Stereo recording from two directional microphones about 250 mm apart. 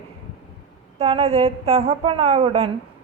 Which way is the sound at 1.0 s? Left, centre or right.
Right.